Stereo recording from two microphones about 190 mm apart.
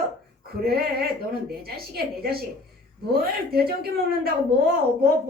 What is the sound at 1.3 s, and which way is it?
A woman's voice, 55° right (ahead or behind).